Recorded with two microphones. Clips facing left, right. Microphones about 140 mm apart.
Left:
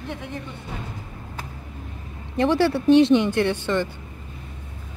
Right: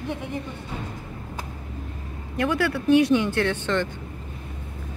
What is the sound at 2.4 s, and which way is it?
Speech, 30° left (ahead or behind).